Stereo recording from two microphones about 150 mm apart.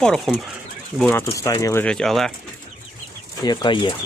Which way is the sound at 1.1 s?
20° left (ahead or behind).